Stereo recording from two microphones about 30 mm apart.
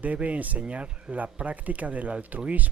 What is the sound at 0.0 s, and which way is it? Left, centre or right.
Speech, right.